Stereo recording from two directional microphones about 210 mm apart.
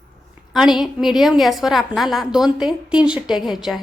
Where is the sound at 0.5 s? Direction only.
Centre (ahead or behind).